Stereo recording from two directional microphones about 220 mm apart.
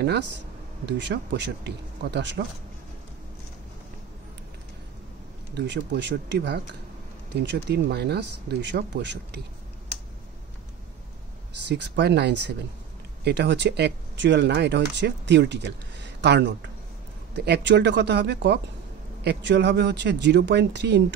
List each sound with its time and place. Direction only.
0.0 s speech: 50° right (ahead or behind)
5.5 s speech: 50° right (ahead or behind)
11.6 s speech: 50° right (ahead or behind)